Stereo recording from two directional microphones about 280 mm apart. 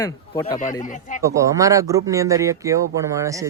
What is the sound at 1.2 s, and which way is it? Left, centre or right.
Speech, centre.